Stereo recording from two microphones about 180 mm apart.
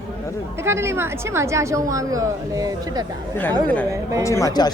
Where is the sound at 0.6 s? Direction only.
15° right (ahead or behind).